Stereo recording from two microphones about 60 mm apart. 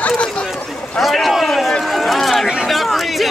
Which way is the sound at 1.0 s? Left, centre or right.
Centre.